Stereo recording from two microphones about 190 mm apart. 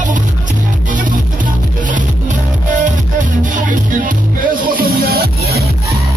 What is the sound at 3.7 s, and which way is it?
Music, 45° right (ahead or behind).